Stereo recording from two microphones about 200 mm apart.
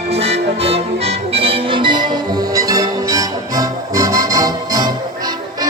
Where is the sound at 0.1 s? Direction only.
30° right (ahead or behind).